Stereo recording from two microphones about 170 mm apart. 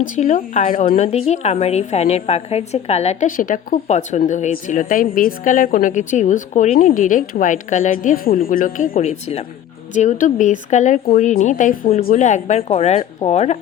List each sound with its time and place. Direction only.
0.0 s a woman's voice: 50° left (ahead or behind)